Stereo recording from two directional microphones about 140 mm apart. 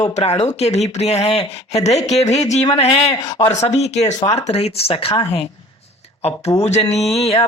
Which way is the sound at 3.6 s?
50° left (ahead or behind).